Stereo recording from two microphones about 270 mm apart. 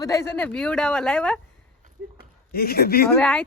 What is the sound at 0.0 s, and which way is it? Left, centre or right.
Speech, centre.